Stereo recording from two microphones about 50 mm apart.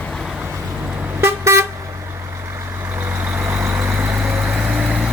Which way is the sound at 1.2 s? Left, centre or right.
Right.